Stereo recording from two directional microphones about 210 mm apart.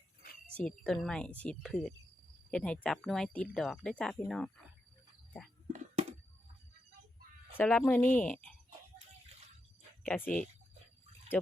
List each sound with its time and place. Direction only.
0.5 s speech: 5° left (ahead or behind)
5.7 s a sound: 30° right (ahead or behind)
7.5 s speech: 5° left (ahead or behind)
10.1 s speech: 5° left (ahead or behind)
11.3 s speech: 10° left (ahead or behind)